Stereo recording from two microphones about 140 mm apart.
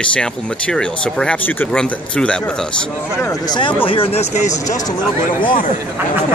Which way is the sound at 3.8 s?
40° left (ahead or behind).